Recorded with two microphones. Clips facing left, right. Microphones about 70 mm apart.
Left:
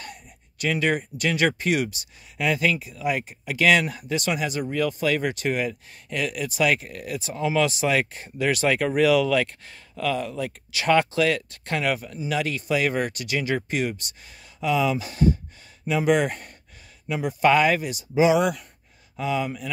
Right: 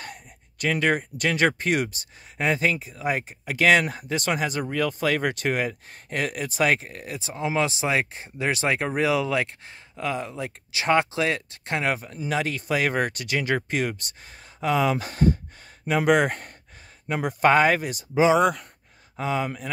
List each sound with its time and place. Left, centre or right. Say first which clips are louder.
0.0 s speech: right 1 dB; right